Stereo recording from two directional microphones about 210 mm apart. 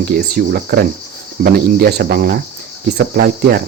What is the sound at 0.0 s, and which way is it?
Speech, 50° right (ahead or behind).